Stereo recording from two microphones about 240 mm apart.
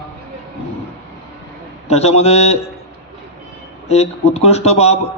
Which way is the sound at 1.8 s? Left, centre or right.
Left.